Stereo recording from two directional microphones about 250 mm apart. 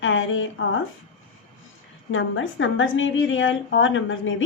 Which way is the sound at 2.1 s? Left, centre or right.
Left.